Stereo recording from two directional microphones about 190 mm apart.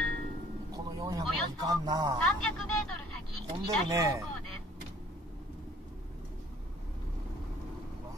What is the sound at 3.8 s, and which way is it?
Speech, 15° right (ahead or behind).